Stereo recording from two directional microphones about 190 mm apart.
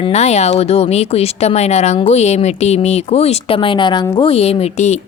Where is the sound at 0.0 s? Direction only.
35° left (ahead or behind).